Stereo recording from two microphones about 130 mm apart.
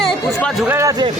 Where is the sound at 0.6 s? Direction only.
20° right (ahead or behind).